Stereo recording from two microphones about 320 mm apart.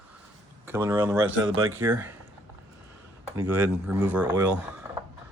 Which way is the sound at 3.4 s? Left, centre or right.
Centre.